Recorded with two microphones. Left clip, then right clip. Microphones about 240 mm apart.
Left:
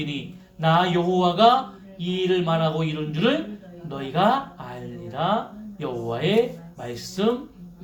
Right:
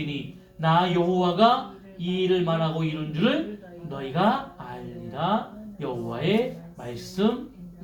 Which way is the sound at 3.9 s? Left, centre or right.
Left.